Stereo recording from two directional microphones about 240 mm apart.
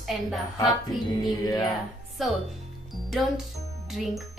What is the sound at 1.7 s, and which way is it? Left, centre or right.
A child's voice, centre.